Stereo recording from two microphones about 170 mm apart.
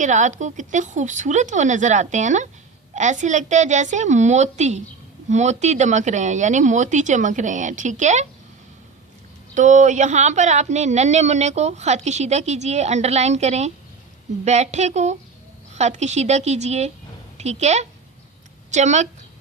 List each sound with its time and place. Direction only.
0.0 s speech: 45° right (ahead or behind)
9.6 s a woman's voice: 45° right (ahead or behind)